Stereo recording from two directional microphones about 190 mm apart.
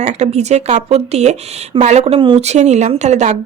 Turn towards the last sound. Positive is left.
turn(degrees=-40)  # may be behind; listen again after turning